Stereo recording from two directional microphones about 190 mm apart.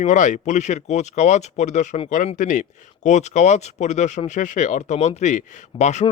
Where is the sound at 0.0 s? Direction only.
40° left (ahead or behind).